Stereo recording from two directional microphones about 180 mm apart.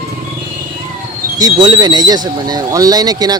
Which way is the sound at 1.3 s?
20° right (ahead or behind).